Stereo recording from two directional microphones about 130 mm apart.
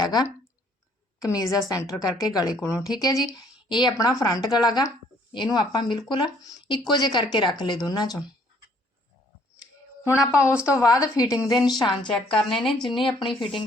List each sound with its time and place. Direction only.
0.0 s a woman's voice: 35° left (ahead or behind)
10.2 s speech: 20° left (ahead or behind)
11.5 s speech: 5° right (ahead or behind)
12.9 s speech: 40° left (ahead or behind)
13.2 s speech: centre (ahead or behind)